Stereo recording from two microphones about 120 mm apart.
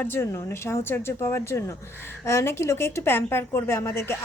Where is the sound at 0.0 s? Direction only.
20° left (ahead or behind).